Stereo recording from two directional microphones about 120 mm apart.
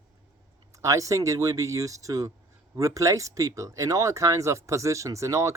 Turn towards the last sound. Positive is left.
turn(degrees=-25)  # may be behind; listen again after turning